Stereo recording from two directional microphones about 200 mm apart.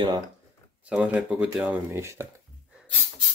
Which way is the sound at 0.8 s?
5° right (ahead or behind).